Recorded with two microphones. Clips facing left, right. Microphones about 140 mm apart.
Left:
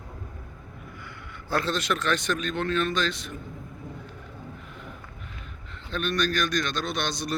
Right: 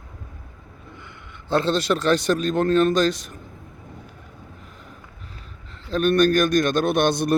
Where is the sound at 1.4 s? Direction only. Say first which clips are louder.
Right 6 dB; 25° right (ahead or behind).